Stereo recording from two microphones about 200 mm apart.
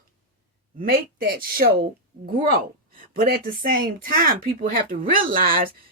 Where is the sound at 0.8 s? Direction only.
45° right (ahead or behind).